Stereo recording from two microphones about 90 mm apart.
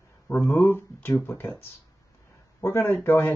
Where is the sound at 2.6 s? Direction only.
25° left (ahead or behind).